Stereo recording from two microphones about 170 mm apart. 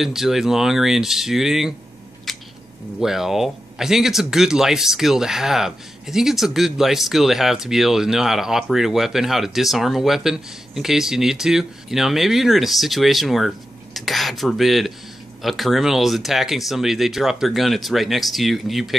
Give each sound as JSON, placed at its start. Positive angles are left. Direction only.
{"t": 0.0, "sound": "speech", "side_deg": 0}
{"t": 2.3, "sound": "a sound", "side_deg": 0}
{"t": 3.0, "sound": "speech", "side_deg": 0}